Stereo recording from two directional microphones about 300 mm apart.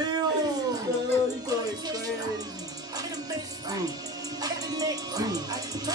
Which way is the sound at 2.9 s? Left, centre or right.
Centre.